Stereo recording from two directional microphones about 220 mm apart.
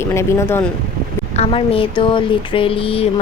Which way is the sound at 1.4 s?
25° left (ahead or behind).